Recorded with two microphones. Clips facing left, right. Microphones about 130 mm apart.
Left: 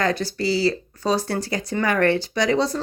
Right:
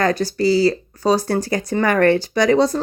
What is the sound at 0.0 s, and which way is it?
Speech, 40° right (ahead or behind).